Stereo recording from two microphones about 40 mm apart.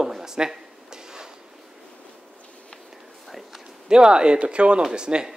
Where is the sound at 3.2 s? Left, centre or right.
Centre.